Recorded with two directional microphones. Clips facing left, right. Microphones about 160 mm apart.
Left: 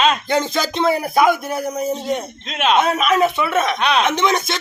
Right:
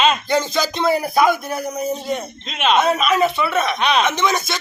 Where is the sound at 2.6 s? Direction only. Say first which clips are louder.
Left 1 dB; 5° right (ahead or behind).